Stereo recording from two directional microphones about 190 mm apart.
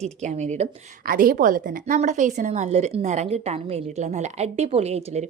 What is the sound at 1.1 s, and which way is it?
A woman's voice, 50° right (ahead or behind).